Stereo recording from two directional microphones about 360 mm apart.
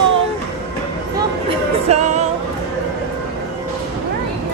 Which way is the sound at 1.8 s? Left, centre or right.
Centre.